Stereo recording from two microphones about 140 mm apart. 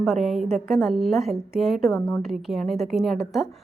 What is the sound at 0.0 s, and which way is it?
A woman's voice, centre (ahead or behind).